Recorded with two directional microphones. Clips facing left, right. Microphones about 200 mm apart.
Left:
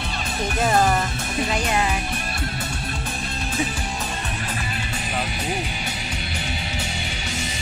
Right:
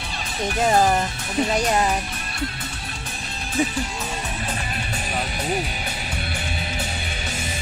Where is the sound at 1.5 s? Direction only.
40° right (ahead or behind).